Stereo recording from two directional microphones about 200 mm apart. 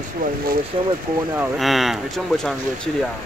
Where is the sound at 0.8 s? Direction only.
25° right (ahead or behind).